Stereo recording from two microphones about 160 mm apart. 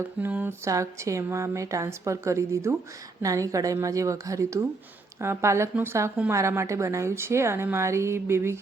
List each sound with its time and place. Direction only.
0.2 s a woman's voice: 10° right (ahead or behind)